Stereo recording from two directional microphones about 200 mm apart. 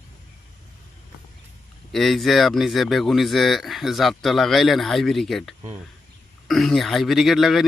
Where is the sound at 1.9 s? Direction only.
Centre (ahead or behind).